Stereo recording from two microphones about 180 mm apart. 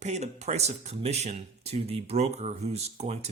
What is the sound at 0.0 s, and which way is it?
Speech, 40° right (ahead or behind).